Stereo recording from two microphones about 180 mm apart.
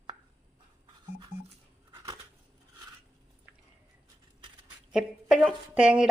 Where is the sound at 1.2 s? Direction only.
25° right (ahead or behind).